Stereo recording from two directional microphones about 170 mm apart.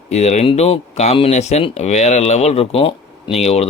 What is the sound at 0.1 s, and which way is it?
Speech, 40° left (ahead or behind).